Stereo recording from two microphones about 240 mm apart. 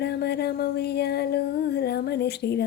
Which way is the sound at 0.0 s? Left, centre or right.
Left.